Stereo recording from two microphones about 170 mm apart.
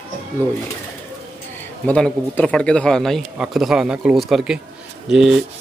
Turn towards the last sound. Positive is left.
turn(degrees=0)  # may be behind; listen again after turning